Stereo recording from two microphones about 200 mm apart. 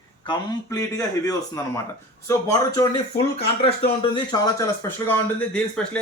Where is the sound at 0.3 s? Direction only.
15° left (ahead or behind).